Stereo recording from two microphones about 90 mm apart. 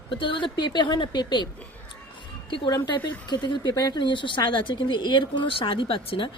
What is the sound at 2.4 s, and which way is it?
Speech, 65° left (ahead or behind).